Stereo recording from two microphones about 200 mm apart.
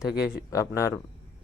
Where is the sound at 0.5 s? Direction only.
15° left (ahead or behind).